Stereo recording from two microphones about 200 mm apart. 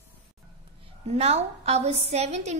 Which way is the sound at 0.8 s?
30° right (ahead or behind).